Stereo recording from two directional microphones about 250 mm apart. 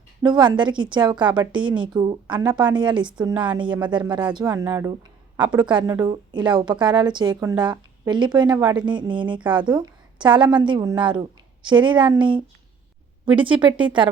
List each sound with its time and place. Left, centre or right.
0.2 s a woman's voice: centre
13.4 s a woman's voice: centre